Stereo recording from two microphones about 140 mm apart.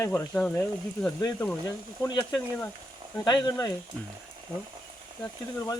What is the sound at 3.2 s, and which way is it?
Speech, 30° left (ahead or behind).